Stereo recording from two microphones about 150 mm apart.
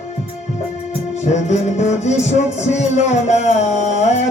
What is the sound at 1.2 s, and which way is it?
Music, 50° left (ahead or behind).